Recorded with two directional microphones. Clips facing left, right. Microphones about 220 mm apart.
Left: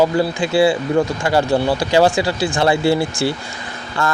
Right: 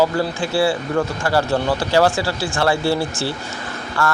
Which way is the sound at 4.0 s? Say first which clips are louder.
Even; 20° left (ahead or behind).